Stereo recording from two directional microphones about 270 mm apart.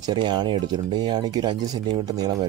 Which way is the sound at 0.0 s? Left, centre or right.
Centre.